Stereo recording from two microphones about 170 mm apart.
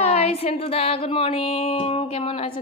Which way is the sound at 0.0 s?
40° left (ahead or behind).